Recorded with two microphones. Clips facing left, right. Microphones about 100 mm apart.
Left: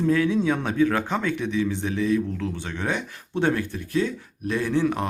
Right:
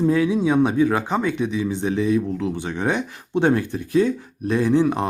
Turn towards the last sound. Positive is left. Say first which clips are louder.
# right 5 dB
turn(degrees=-20)  # may be behind; listen again after turning